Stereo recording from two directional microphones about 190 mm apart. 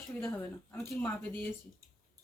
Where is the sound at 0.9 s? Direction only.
10° left (ahead or behind).